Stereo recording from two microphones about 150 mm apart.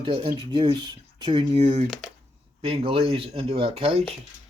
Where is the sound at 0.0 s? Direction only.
40° right (ahead or behind).